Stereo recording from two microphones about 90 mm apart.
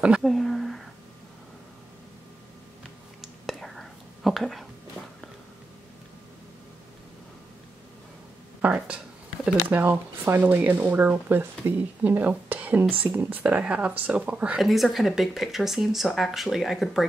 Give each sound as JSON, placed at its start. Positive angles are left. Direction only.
{"t": 0.2, "sound": "speech", "side_deg": 0}
{"t": 3.2, "sound": "whispering", "side_deg": 0}
{"t": 8.5, "sound": "speech", "side_deg": -15}
{"t": 14.6, "sound": "speech", "side_deg": 0}